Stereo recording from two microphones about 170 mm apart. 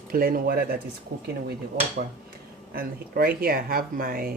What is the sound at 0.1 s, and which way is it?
Speech, 60° right (ahead or behind).